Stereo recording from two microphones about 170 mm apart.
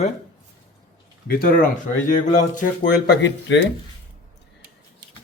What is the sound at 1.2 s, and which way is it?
Speech, 60° left (ahead or behind).